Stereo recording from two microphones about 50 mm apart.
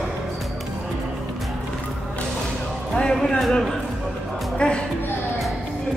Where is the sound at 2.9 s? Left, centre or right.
Centre.